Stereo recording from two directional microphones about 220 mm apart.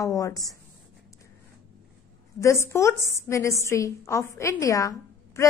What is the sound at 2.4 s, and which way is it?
A woman's voice, 15° left (ahead or behind).